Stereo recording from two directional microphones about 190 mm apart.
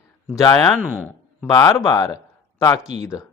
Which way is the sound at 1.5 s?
20° left (ahead or behind).